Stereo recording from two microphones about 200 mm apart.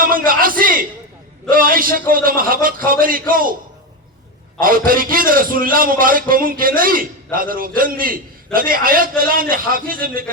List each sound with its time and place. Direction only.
0.0 s a man's voice: 45° right (ahead or behind)
4.6 s a man's voice: 45° right (ahead or behind)